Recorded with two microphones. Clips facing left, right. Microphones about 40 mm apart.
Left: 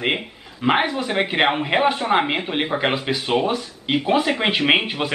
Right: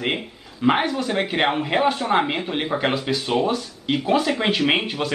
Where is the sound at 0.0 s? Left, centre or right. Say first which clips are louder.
Left 2 dB; left.